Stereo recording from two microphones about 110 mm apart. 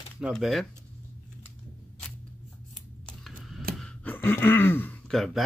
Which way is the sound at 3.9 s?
15° left (ahead or behind).